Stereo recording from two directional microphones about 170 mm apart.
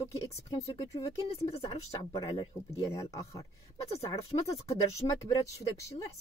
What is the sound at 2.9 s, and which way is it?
Speech, 20° left (ahead or behind).